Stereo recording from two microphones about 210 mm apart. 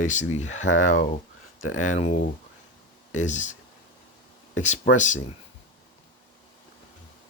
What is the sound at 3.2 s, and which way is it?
Speech, 35° left (ahead or behind).